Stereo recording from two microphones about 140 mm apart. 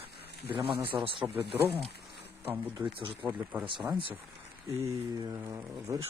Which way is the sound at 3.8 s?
25° right (ahead or behind).